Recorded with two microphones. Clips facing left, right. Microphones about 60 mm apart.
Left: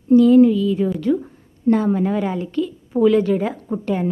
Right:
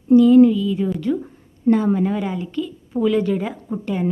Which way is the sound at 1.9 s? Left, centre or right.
Left.